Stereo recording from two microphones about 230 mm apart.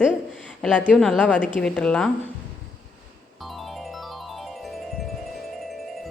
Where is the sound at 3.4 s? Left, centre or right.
Centre.